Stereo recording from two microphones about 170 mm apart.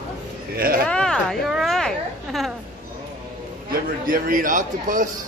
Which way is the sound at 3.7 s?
55° right (ahead or behind).